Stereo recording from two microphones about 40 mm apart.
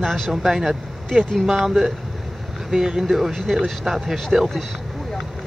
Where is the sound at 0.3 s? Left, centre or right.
Centre.